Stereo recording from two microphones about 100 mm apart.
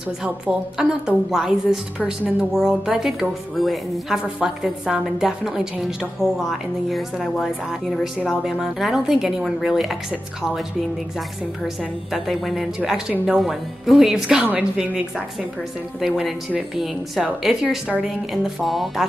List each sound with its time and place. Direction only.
0.2 s a woman's voice: 10° right (ahead or behind)
11.6 s a woman's voice: centre (ahead or behind)
14.4 s a woman's voice: 15° right (ahead or behind)
16.0 s a woman's voice: 5° right (ahead or behind)